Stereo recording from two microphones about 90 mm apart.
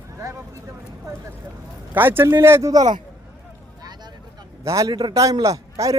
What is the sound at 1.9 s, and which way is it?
Speech, 25° right (ahead or behind).